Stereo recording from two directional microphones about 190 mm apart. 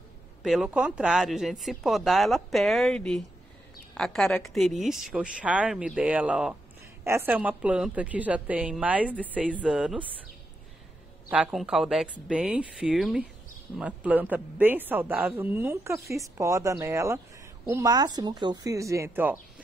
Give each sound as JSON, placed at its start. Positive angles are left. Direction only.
{"t": 0.4, "sound": "speech", "side_deg": 0}
{"t": 11.2, "sound": "speech", "side_deg": -5}